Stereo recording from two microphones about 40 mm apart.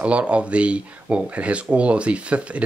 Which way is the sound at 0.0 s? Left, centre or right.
Right.